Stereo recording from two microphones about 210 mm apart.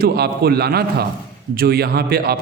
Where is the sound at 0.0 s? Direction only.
50° right (ahead or behind).